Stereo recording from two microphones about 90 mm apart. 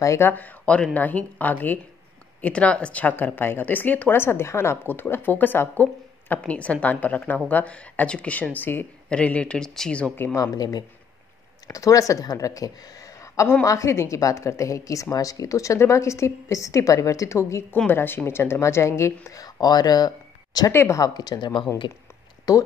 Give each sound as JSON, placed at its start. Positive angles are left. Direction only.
{"t": 0.0, "sound": "a woman's voice", "side_deg": 35}
{"t": 0.3, "sound": "speech", "side_deg": 15}
{"t": 10.3, "sound": "a woman's voice", "side_deg": 45}
{"t": 19.2, "sound": "speech", "side_deg": 45}
{"t": 20.7, "sound": "speech", "side_deg": 30}
{"t": 21.0, "sound": "speech", "side_deg": 50}
{"t": 21.8, "sound": "speech", "side_deg": 60}
{"t": 22.5, "sound": "a woman's voice", "side_deg": 40}